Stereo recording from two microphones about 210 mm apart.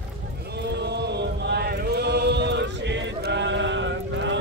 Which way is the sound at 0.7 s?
55° right (ahead or behind).